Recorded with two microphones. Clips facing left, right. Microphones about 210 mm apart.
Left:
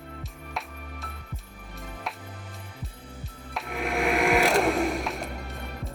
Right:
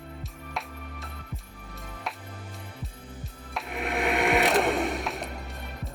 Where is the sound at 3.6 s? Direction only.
Centre (ahead or behind).